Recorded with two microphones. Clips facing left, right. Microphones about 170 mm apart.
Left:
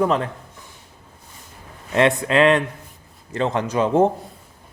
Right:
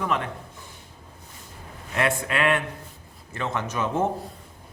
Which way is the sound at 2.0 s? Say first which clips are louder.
Left 8 dB; 25° left (ahead or behind).